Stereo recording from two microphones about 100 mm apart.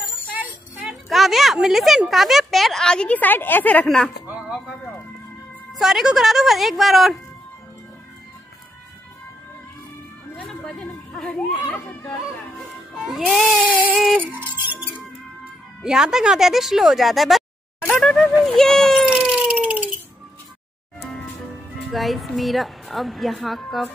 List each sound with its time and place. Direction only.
0.3 s a sound: 15° right (ahead or behind)
0.8 s speech: centre (ahead or behind); by 3.8 s 15° left (ahead or behind)
3.8 s a woman's voice: 5° left (ahead or behind)
4.3 s music: 10° right (ahead or behind)
5.7 s a woman's voice: 5° right (ahead or behind)
11.1 s a child's voice: 5° left (ahead or behind)
13.0 s a woman's voice: centre (ahead or behind)
14.3 s music: 20° right (ahead or behind)
15.8 s a woman's voice: 5° right (ahead or behind)
19.1 s a sound: 10° right (ahead or behind)
21.9 s a woman's voice: centre (ahead or behind)